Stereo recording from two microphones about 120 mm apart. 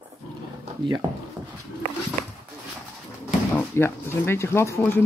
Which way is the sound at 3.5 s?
20° left (ahead or behind).